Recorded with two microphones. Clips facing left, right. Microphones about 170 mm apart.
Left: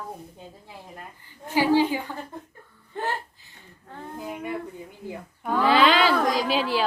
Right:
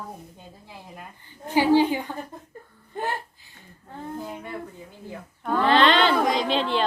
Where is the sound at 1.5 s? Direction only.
20° right (ahead or behind).